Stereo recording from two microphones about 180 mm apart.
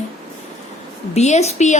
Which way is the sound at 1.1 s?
40° left (ahead or behind).